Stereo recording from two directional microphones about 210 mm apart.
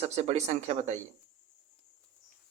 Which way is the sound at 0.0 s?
30° right (ahead or behind).